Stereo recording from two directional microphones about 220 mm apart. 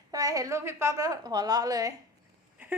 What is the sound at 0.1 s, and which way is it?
A woman's voice, 15° right (ahead or behind).